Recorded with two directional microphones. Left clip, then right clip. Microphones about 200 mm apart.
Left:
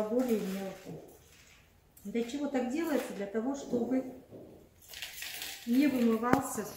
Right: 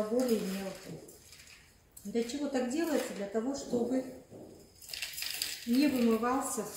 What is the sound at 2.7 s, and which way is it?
Speech, 15° left (ahead or behind).